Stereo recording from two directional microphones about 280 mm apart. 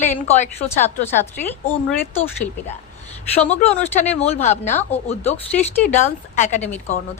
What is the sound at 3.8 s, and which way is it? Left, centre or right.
Speech, left.